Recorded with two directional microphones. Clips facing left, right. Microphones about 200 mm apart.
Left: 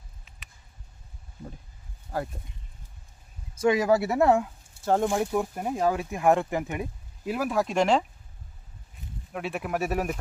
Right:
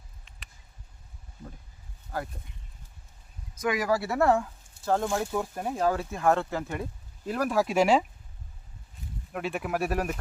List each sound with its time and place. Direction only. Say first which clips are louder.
2.1 s speech: left 3 dB; 25° left (ahead or behind)
3.5 s speech: left 5 dB; 30° left (ahead or behind)
7.3 s speech: even; 5° left (ahead or behind)
9.3 s speech: even; centre (ahead or behind)